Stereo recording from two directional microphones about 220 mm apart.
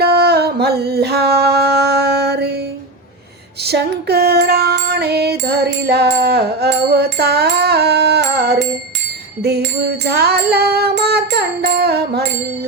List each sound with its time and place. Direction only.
0.0 s singing: 45° right (ahead or behind)
3.6 s music: 45° right (ahead or behind)